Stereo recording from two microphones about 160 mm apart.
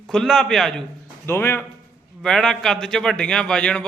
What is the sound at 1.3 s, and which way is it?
Speech, 15° left (ahead or behind).